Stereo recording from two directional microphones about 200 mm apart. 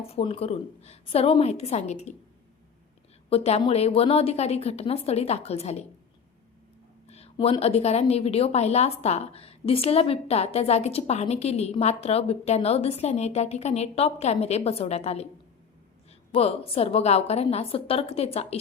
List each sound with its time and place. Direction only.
0.0 s a woman's voice: 30° left (ahead or behind)
3.2 s a woman's voice: 30° left (ahead or behind)
7.1 s a woman's voice: 30° left (ahead or behind)
16.3 s a woman's voice: 30° left (ahead or behind)